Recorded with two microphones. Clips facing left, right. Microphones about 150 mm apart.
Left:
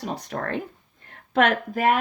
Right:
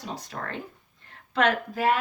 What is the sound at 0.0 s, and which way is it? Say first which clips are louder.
A woman's voice: left 6 dB; 60° left (ahead or behind).